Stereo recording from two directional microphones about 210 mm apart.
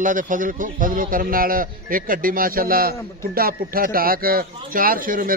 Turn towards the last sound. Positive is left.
turn(degrees=-40)  # may be behind; listen again after turning